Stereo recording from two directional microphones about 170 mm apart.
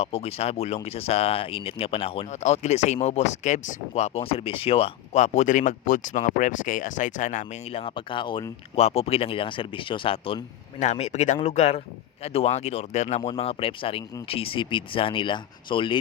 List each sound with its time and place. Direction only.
0.0 s speech: 35° left (ahead or behind)
7.7 s speech: 35° left (ahead or behind)